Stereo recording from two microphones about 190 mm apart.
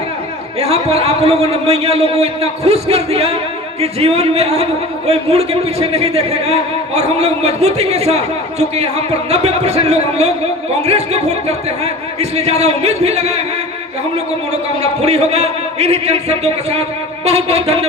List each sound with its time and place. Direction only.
0.6 s a man's voice: 35° right (ahead or behind)
14.8 s a man's voice: 35° right (ahead or behind)